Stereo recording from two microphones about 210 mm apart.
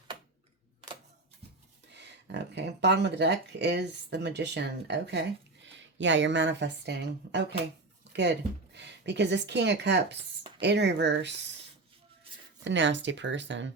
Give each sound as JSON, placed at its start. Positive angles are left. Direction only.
{"t": 1.9, "sound": "speech", "side_deg": -55}
{"t": 12.6, "sound": "speech", "side_deg": -60}